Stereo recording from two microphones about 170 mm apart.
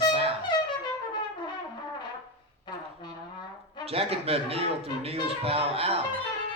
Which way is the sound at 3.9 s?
35° right (ahead or behind).